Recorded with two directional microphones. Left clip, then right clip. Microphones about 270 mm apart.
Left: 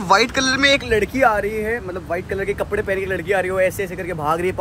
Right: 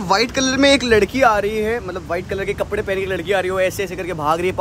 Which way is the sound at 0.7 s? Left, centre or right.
Right.